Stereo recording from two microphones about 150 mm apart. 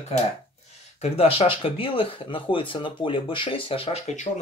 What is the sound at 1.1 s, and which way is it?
Speech, 40° left (ahead or behind).